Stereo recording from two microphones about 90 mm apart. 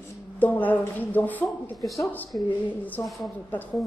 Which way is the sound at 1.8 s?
Centre (ahead or behind).